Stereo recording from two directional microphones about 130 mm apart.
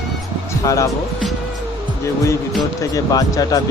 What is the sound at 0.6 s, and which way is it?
Speech, 25° left (ahead or behind).